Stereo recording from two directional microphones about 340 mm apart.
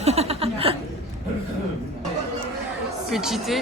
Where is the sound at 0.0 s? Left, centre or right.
Centre.